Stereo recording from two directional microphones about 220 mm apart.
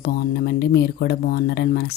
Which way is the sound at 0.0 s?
45° left (ahead or behind).